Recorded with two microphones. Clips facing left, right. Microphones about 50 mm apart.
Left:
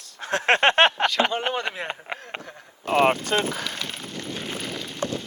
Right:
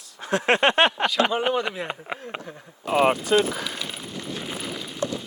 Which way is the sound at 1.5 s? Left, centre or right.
Left.